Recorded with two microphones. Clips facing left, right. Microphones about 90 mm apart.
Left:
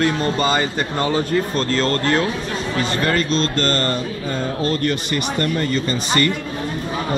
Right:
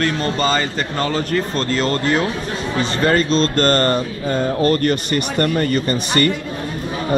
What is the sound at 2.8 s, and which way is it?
A man's voice, 30° right (ahead or behind).